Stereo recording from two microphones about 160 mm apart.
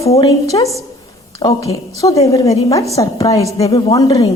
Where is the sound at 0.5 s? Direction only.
20° left (ahead or behind).